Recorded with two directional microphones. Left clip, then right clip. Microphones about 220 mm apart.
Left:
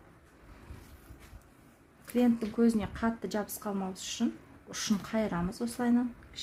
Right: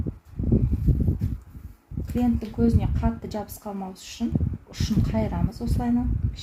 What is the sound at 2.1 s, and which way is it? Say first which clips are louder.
Speech: right 2 dB; 20° left (ahead or behind).